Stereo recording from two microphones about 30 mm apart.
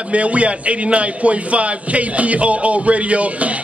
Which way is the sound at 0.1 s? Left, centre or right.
Right.